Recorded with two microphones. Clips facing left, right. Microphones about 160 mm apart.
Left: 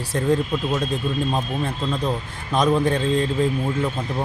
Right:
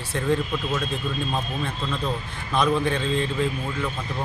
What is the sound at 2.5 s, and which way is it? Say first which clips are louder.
Speech: left 3 dB; 40° left (ahead or behind).